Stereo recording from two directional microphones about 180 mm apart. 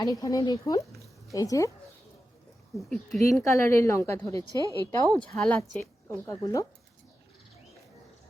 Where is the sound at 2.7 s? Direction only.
Centre (ahead or behind).